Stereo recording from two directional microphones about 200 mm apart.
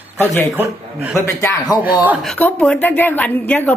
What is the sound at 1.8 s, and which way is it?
Speech, 10° right (ahead or behind).